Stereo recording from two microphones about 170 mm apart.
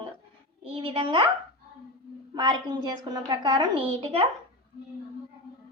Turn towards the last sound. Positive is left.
turn(degrees=-35)  # may be behind; listen again after turning